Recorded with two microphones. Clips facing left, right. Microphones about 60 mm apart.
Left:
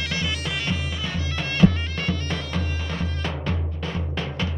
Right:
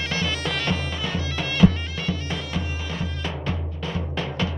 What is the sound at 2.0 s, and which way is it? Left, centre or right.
Music, left.